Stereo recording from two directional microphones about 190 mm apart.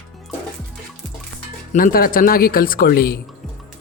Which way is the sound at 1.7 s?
45° left (ahead or behind).